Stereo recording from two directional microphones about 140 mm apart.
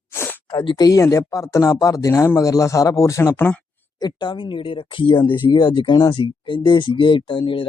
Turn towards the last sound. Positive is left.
turn(degrees=35)  # may be behind; listen again after turning